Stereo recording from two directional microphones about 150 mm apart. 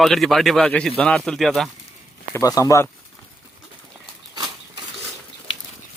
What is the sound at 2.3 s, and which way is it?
Speech, 25° left (ahead or behind).